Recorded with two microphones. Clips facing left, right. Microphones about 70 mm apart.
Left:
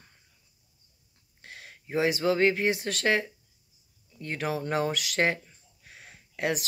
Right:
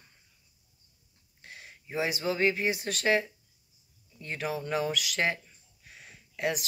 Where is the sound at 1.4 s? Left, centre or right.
Left.